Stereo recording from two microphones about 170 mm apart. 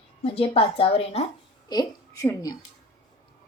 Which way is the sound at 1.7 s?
20° left (ahead or behind).